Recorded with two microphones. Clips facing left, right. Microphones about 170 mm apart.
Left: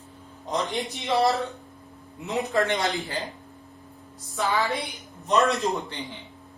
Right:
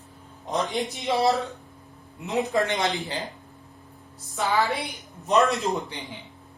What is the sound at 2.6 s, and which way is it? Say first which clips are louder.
Speech: even; 20° right (ahead or behind).